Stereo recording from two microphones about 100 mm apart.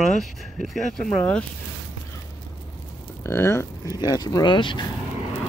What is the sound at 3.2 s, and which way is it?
Speech, 25° left (ahead or behind).